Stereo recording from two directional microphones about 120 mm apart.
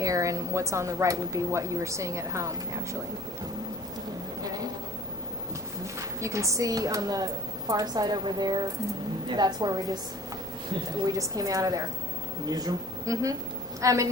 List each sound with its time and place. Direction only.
0.0 s speech: 30° right (ahead or behind)
6.0 s a woman's voice: 25° right (ahead or behind)
11.0 s a woman's voice: 30° right (ahead or behind)